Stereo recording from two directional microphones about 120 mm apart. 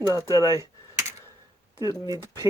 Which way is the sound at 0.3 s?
30° right (ahead or behind).